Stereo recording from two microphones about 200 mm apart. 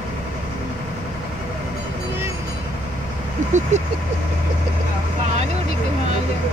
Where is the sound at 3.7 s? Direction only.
35° right (ahead or behind).